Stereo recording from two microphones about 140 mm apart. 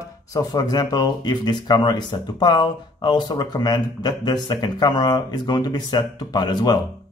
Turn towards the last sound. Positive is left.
turn(degrees=30)  # may be behind; listen again after turning